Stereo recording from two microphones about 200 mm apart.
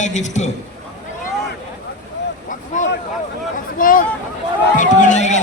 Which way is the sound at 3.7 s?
45° left (ahead or behind).